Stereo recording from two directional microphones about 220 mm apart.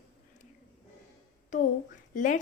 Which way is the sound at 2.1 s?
35° left (ahead or behind).